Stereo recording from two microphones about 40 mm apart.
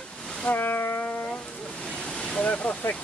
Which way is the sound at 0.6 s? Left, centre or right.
Left.